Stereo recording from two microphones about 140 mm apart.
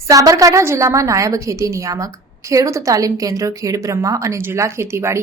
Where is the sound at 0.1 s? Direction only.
25° right (ahead or behind).